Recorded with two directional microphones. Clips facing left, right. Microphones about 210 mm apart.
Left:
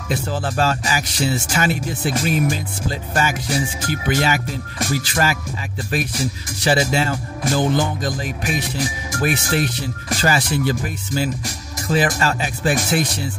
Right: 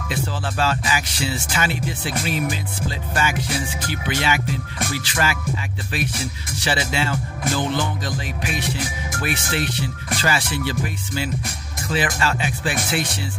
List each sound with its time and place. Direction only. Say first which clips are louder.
0.1 s speech: left 4 dB; 45° left (ahead or behind)
3.9 s speech: left 4 dB; 45° left (ahead or behind)
6.6 s speech: left 5 dB; 45° left (ahead or behind)